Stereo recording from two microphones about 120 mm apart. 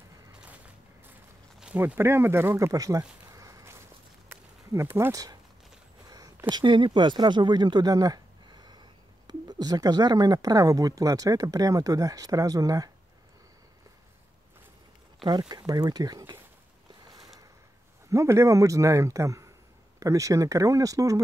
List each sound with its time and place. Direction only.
1.8 s speech: 20° right (ahead or behind)
4.3 s a sound: 20° right (ahead or behind)
6.5 s speech: 40° right (ahead or behind)
15.2 s speech: 35° right (ahead or behind)
18.1 s speech: 25° right (ahead or behind)